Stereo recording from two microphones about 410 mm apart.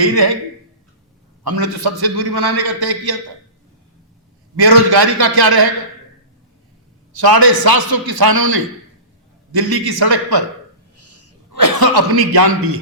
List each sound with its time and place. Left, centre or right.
0.0 s a man's voice: right
1.5 s a man's voice: right
4.5 s a man's voice: right
7.1 s a man's voice: right
11.8 s a man's voice: right